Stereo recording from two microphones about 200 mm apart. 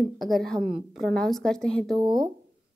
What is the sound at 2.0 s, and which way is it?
Speech, 20° right (ahead or behind).